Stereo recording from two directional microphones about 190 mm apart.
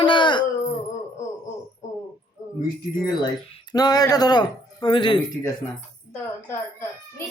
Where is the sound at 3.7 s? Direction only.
20° left (ahead or behind).